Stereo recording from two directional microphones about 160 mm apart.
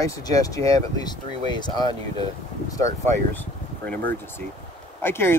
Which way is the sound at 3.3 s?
10° left (ahead or behind).